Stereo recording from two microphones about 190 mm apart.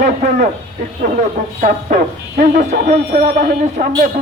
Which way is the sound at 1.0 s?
40° right (ahead or behind).